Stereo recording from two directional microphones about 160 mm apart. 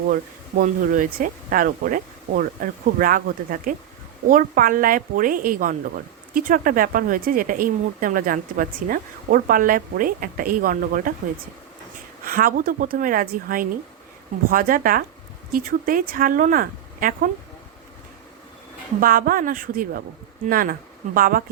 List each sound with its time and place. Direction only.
0.1 s a woman's voice: 55° right (ahead or behind)
12.2 s a woman's voice: 60° right (ahead or behind)
18.9 s a woman's voice: 60° right (ahead or behind)